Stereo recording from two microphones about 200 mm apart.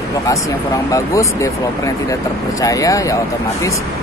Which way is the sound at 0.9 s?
15° left (ahead or behind).